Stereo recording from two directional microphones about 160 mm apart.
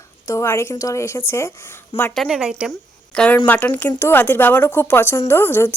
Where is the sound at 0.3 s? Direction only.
15° left (ahead or behind).